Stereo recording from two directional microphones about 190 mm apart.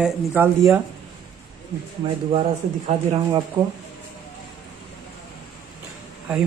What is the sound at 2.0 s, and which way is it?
Speech, 25° right (ahead or behind).